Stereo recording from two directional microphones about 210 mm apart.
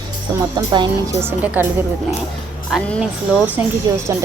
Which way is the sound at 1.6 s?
10° right (ahead or behind).